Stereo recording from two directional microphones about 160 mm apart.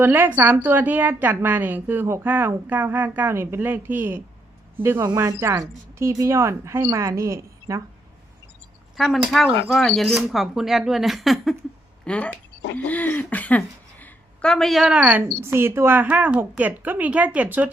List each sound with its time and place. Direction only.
0.0 s a woman's voice: 10° right (ahead or behind)
9.0 s a woman's voice: centre (ahead or behind)